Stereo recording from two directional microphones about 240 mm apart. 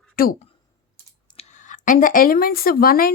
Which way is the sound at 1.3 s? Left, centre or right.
Left.